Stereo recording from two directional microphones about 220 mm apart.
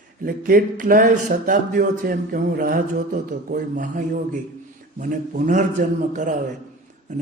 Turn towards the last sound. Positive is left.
turn(degrees=-35)  # may be behind; listen again after turning